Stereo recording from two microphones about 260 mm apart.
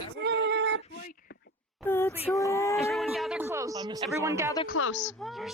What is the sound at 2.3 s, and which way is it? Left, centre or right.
Speech, centre.